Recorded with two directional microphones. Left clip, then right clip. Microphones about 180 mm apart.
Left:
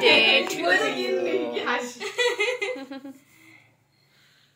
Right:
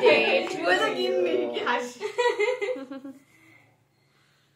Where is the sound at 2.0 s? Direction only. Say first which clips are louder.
Left 1 dB; 25° right (ahead or behind).